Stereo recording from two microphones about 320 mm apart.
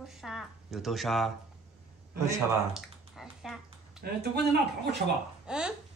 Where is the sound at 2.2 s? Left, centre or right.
Centre.